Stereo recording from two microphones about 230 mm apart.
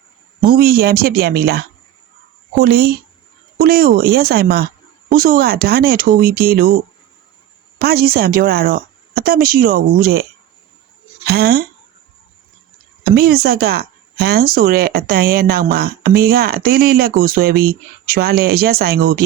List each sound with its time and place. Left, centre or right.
0.4 s speech: right
7.8 s speech: right
11.3 s speech: right
13.1 s speech: right